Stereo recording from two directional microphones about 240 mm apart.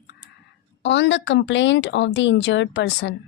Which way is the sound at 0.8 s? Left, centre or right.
Left.